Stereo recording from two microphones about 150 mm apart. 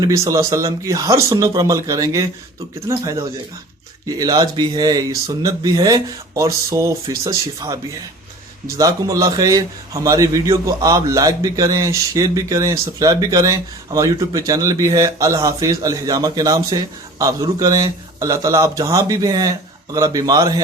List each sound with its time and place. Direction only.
0.0 s a man's voice: 25° right (ahead or behind)
8.8 s a man's voice: 20° right (ahead or behind)